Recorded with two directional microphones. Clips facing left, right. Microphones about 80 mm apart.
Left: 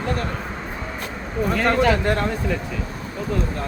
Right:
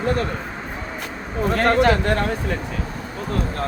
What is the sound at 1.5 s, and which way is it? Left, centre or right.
Speech, right.